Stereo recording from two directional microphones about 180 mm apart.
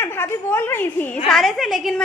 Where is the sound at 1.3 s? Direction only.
Centre (ahead or behind).